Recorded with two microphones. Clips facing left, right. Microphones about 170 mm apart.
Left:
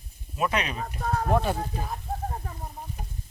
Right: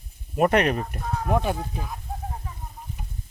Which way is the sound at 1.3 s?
15° right (ahead or behind).